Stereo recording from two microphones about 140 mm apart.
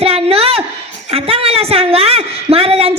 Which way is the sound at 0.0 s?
45° right (ahead or behind).